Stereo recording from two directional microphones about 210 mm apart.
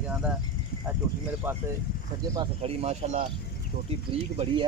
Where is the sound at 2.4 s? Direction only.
30° right (ahead or behind).